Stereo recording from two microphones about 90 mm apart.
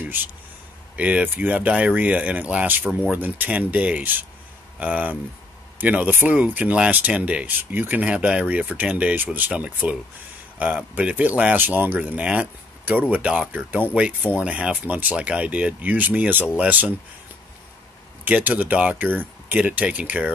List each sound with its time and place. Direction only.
0.0 s a sound: 20° right (ahead or behind)
0.9 s speech: 15° right (ahead or behind)
18.2 s speech: 15° right (ahead or behind)